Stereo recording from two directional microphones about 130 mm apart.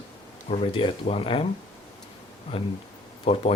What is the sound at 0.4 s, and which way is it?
Speech, 50° left (ahead or behind).